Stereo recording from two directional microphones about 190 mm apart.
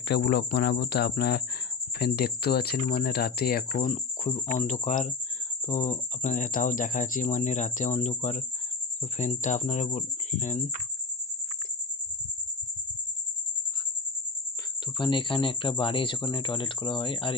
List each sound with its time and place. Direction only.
0.1 s speech: 60° left (ahead or behind); by 10.7 s 40° left (ahead or behind)
15.0 s speech: 25° left (ahead or behind)